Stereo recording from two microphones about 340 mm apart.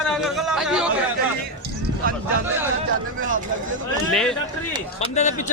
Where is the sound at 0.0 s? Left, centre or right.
Centre.